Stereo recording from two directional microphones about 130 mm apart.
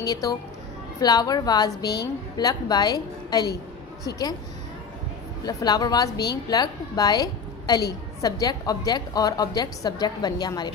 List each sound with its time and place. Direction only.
0.0 s a woman's voice: 30° left (ahead or behind)
5.4 s a woman's voice: 30° left (ahead or behind)